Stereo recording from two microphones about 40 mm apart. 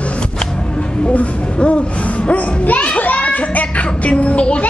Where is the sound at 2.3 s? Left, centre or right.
Left.